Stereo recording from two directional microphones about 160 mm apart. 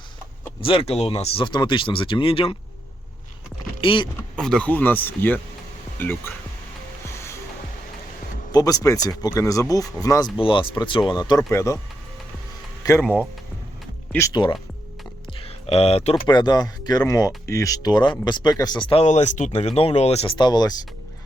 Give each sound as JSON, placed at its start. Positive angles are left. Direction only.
{"t": 0.6, "sound": "speech", "side_deg": 35}
{"t": 3.8, "sound": "speech", "side_deg": 35}
{"t": 4.2, "sound": "speech", "side_deg": 5}
{"t": 7.0, "sound": "music", "side_deg": 15}
{"t": 8.5, "sound": "speech", "side_deg": 20}
{"t": 12.8, "sound": "speech", "side_deg": 20}
{"t": 14.1, "sound": "speech", "side_deg": 15}
{"t": 15.4, "sound": "a sound", "side_deg": 40}
{"t": 16.2, "sound": "speech", "side_deg": 30}
{"t": 20.4, "sound": "speech", "side_deg": 25}